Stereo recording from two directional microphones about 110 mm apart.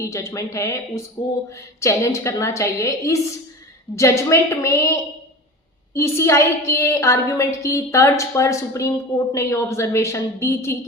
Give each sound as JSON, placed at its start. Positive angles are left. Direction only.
{"t": 0.0, "sound": "a woman's voice", "side_deg": 30}
{"t": 5.9, "sound": "a woman's voice", "side_deg": 25}